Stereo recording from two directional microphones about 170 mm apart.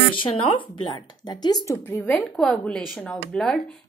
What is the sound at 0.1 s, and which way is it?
Speech, 30° left (ahead or behind).